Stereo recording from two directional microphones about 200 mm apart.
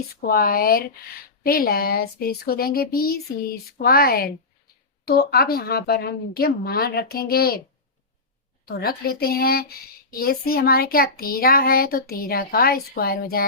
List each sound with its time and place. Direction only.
0.2 s speech: 50° left (ahead or behind)
8.6 s speech: 50° left (ahead or behind)